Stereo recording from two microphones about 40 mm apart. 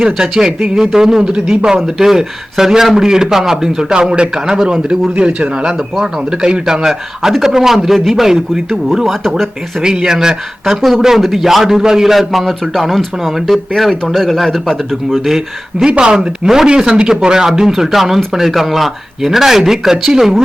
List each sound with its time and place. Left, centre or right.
0.0 s speech: centre
5.2 s speech: right
9.0 s speech: centre
9.8 s speech: centre
10.7 s speech: centre
12.1 s speech: centre
15.2 s speech: centre
15.9 s speech: right
16.4 s speech: centre